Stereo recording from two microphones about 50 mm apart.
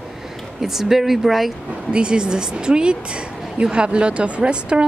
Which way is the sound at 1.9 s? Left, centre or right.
Centre.